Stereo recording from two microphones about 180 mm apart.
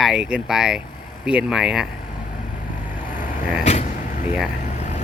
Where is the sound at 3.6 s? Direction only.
40° left (ahead or behind).